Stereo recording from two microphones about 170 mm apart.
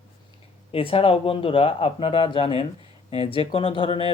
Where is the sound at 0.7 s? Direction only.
35° left (ahead or behind).